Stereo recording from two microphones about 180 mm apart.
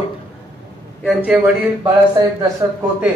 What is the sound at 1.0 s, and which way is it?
Speech, 5° right (ahead or behind).